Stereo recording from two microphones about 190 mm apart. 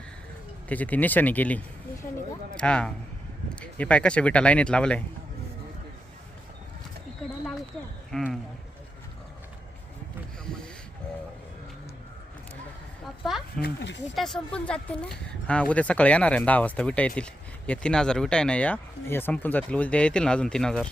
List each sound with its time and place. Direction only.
0.7 s speech: 10° left (ahead or behind)
8.1 s speech: centre (ahead or behind)
13.6 s speech: 65° left (ahead or behind)
14.2 s speech: 5° left (ahead or behind)